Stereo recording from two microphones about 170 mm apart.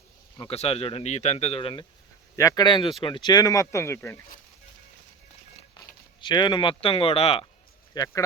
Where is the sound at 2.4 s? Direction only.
20° left (ahead or behind).